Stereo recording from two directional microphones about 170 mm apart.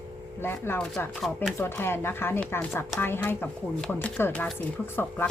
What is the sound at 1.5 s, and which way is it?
Speech, 15° left (ahead or behind).